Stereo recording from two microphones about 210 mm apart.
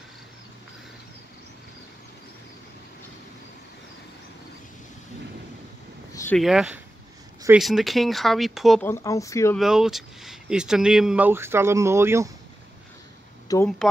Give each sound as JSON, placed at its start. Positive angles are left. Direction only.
{"t": 6.1, "sound": "a sound", "side_deg": 10}
{"t": 6.4, "sound": "speech", "side_deg": 0}
{"t": 8.8, "sound": "speech", "side_deg": 15}
{"t": 9.6, "sound": "speech", "side_deg": 0}
{"t": 13.5, "sound": "speech", "side_deg": 15}